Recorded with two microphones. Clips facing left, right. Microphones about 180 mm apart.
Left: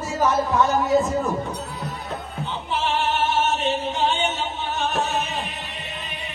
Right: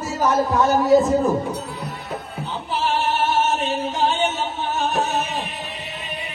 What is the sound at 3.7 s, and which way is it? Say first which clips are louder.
Music: right 1 dB; 40° right (ahead or behind).